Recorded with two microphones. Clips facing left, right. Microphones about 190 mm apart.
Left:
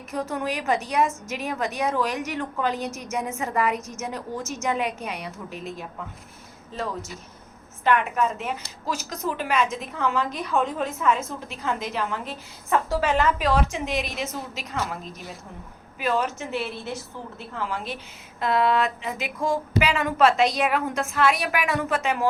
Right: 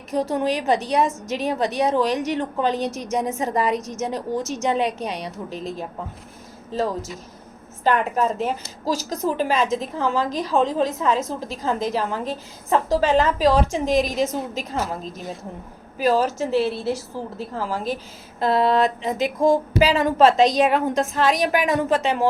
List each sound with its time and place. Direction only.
0.1 s a woman's voice: 35° right (ahead or behind)